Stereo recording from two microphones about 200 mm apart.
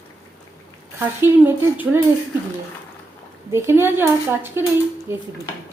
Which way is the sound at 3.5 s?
10° right (ahead or behind).